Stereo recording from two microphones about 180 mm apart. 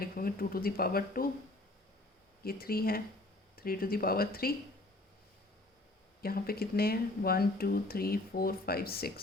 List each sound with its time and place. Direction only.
0.0 s speech: 55° left (ahead or behind)
2.4 s speech: 55° left (ahead or behind)
6.2 s speech: 55° left (ahead or behind)